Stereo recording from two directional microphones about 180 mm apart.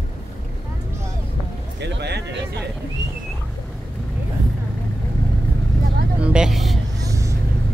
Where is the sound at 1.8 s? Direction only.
70° right (ahead or behind).